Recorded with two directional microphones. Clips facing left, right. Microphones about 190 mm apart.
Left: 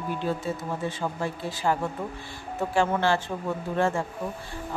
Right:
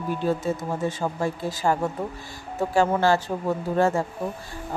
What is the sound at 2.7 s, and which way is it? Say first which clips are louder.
Speech: right 4 dB; 40° right (ahead or behind).